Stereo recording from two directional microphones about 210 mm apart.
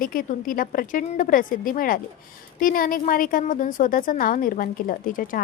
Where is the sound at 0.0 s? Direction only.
40° left (ahead or behind).